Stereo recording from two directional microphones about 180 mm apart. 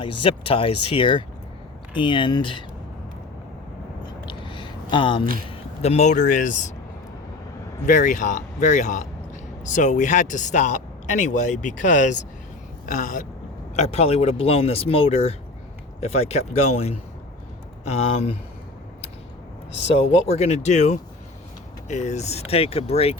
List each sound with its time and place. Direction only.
0.0 s speech: 30° left (ahead or behind)
4.3 s a sound: 25° left (ahead or behind)
5.5 s speech: 35° left (ahead or behind)
7.9 s speech: 45° left (ahead or behind)
13.7 s speech: 35° left (ahead or behind)
20.2 s speech: 35° left (ahead or behind)